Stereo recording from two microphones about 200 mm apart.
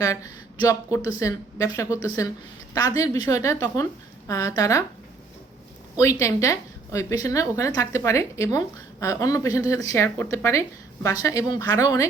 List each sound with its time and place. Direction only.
0.0 s a woman's voice: 15° left (ahead or behind)
6.0 s a woman's voice: 15° left (ahead or behind)